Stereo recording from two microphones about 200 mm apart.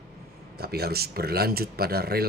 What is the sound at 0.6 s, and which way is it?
A man's voice, 50° right (ahead or behind).